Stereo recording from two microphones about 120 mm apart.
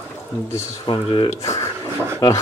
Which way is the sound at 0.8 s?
40° left (ahead or behind).